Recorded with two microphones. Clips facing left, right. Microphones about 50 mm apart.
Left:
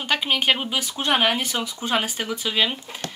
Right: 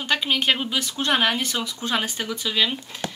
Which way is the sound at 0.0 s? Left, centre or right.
Centre.